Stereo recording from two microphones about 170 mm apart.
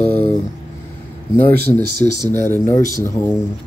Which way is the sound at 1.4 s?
65° right (ahead or behind).